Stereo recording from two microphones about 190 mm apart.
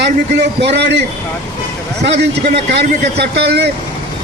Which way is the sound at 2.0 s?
60° right (ahead or behind).